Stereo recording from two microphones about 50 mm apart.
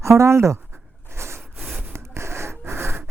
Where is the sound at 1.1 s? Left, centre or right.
Right.